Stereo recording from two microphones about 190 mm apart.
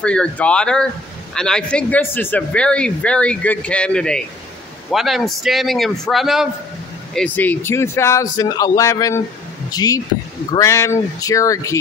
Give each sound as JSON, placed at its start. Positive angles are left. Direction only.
{"t": 0.0, "sound": "a man's voice", "side_deg": 5}
{"t": 7.2, "sound": "a man's voice", "side_deg": 10}